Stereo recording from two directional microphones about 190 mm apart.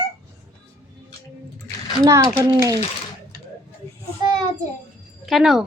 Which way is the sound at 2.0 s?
15° right (ahead or behind).